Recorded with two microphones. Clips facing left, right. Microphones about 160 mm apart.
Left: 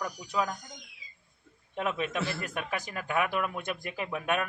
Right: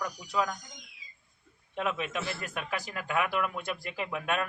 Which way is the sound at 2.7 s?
15° left (ahead or behind).